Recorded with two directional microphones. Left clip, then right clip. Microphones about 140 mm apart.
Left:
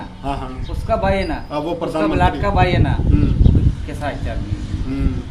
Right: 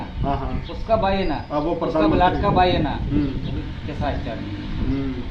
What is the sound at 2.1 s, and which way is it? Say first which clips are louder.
Speech: even; centre (ahead or behind).